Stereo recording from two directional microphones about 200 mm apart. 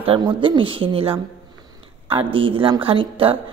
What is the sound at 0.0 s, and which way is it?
A woman's voice, 25° right (ahead or behind).